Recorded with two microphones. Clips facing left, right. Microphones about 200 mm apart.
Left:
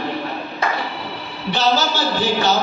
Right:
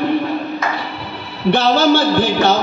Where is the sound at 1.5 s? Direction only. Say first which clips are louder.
Right 6 dB; 60° right (ahead or behind).